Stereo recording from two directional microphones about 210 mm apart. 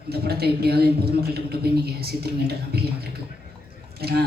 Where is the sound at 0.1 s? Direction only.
50° right (ahead or behind).